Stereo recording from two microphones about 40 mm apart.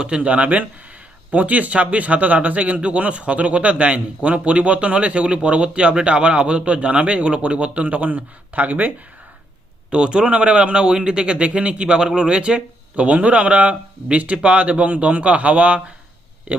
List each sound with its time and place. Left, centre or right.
0.2 s speech: right
9.9 s a man's voice: right
13.1 s speech: right